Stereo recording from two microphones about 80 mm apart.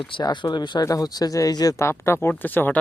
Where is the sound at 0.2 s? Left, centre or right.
Left.